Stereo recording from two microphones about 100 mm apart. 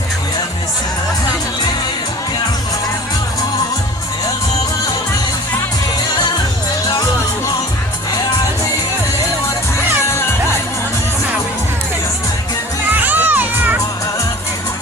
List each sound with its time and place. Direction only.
10.1 s music: 25° left (ahead or behind)
12.9 s children shouting: 20° right (ahead or behind)